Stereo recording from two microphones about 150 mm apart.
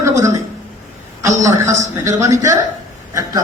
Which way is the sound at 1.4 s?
20° right (ahead or behind).